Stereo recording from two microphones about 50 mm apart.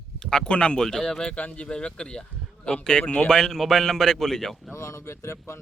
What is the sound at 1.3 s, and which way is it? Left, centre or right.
Speech, left.